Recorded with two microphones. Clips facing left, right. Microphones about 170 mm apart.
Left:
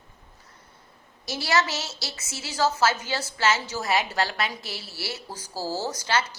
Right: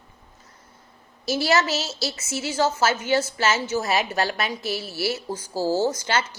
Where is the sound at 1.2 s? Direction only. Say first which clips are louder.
Right 4 dB; 25° right (ahead or behind).